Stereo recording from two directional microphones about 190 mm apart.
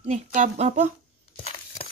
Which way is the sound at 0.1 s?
40° right (ahead or behind).